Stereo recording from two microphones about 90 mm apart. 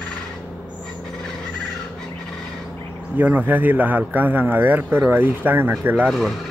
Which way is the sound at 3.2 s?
20° right (ahead or behind).